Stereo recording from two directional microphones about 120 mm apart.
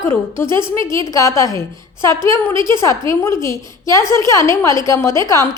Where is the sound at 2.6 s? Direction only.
40° right (ahead or behind).